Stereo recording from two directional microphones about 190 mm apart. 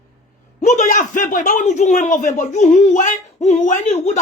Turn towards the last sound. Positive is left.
turn(degrees=35)  # may be behind; listen again after turning